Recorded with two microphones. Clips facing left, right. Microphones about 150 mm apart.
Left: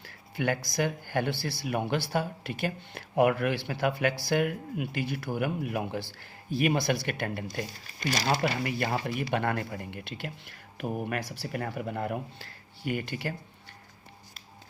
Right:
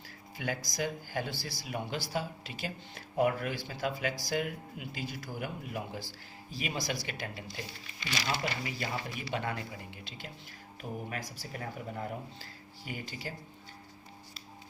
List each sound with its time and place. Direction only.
0.0 s speech: 65° left (ahead or behind); by 8.4 s 45° left (ahead or behind)
8.4 s speech: 60° left (ahead or behind)